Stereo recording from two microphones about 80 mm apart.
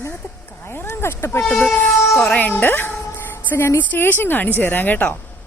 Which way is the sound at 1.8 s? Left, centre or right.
Left.